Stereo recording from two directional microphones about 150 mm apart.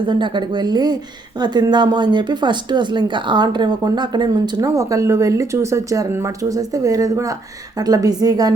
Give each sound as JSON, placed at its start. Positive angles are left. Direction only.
{"t": 0.0, "sound": "speech", "side_deg": -30}